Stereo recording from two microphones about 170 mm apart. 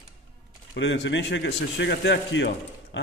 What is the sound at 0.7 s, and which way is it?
A man's voice, 90° left.